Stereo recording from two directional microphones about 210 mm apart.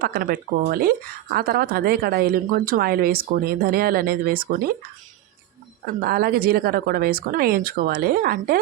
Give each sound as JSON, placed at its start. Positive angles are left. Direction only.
{"t": 0.0, "sound": "speech", "side_deg": -45}
{"t": 5.8, "sound": "speech", "side_deg": -45}